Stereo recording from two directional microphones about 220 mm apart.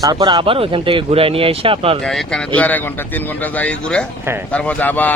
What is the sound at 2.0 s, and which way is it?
Speech, centre (ahead or behind).